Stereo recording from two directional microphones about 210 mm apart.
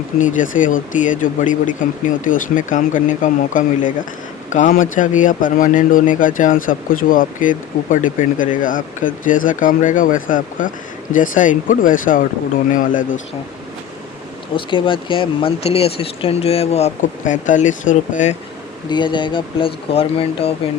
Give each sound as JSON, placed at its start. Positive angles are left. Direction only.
{"t": 0.2, "sound": "speech", "side_deg": 40}
{"t": 14.5, "sound": "speech", "side_deg": 25}
{"t": 18.9, "sound": "speech", "side_deg": 20}